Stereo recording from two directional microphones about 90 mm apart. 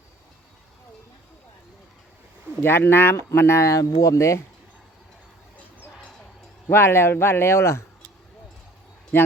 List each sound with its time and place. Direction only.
2.6 s a man's voice: 25° left (ahead or behind)
5.5 s vehicle: 15° left (ahead or behind)
6.7 s a man's voice: 30° left (ahead or behind)